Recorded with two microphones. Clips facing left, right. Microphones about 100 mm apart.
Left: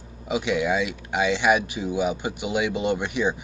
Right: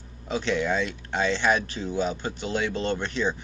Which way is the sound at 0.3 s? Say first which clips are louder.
Left 2 dB; 10° left (ahead or behind).